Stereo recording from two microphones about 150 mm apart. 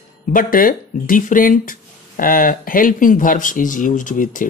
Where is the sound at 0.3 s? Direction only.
65° left (ahead or behind).